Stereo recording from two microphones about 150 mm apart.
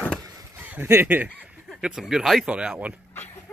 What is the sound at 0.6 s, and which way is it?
Speech, 15° right (ahead or behind).